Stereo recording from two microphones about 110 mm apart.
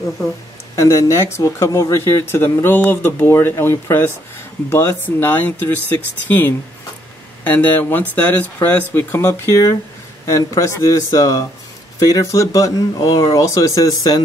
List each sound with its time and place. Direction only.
0.7 s speech: 25° left (ahead or behind)
7.5 s speech: 15° left (ahead or behind); by 14.2 s 35° left (ahead or behind)